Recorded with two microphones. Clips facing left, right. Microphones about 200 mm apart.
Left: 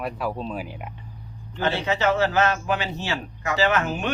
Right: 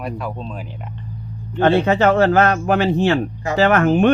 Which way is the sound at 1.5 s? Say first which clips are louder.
Right 10 dB; 55° right (ahead or behind).